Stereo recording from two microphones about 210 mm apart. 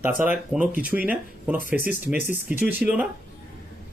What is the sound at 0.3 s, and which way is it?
Speech, 5° right (ahead or behind).